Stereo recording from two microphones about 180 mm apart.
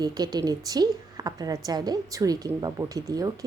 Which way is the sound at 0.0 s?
20° right (ahead or behind).